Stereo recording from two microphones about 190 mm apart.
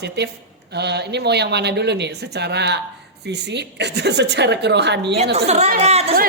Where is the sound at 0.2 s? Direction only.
60° right (ahead or behind).